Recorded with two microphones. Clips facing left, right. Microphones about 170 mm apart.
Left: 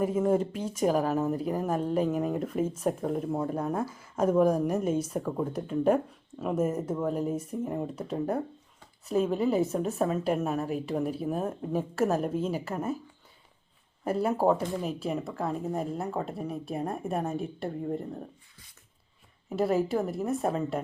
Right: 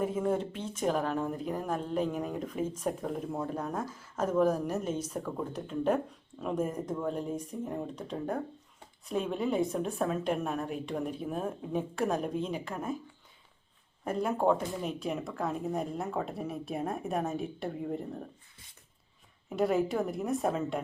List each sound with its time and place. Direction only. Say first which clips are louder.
0.0 s speech: left 4 dB; 10° left (ahead or behind)
14.0 s speech: left 3 dB; 5° left (ahead or behind)
19.5 s speech: left 2 dB; centre (ahead or behind)